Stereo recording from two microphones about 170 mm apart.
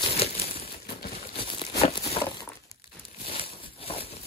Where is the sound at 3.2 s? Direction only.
35° left (ahead or behind).